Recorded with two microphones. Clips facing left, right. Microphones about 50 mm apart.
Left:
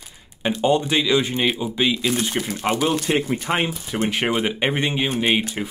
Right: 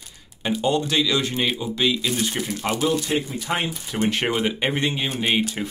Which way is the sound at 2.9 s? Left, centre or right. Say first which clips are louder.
Left 3 dB; left.